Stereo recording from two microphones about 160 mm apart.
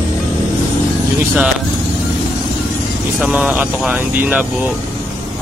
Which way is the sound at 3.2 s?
5° right (ahead or behind).